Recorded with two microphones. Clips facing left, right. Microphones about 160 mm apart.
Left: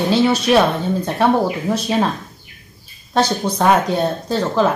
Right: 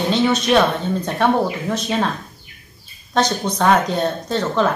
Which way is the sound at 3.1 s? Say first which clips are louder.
Left 2 dB; 30° left (ahead or behind).